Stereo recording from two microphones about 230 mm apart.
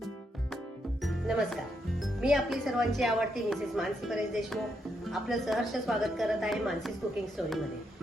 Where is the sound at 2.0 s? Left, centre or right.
Centre.